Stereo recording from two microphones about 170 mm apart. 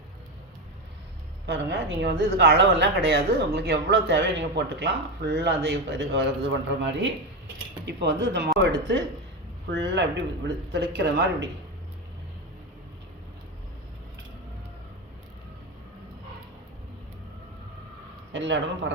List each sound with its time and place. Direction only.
1.5 s speech: 85° right
18.3 s speech: 90° right